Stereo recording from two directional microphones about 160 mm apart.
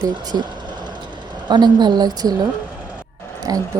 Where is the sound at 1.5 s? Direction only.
25° right (ahead or behind).